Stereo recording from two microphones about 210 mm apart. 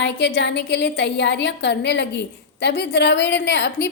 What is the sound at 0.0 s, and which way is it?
A woman's voice, 55° left (ahead or behind).